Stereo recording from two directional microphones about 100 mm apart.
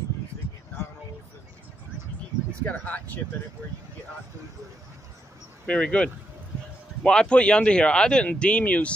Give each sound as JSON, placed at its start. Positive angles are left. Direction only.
{"t": 2.6, "sound": "speech", "side_deg": 15}
{"t": 5.7, "sound": "speech", "side_deg": 10}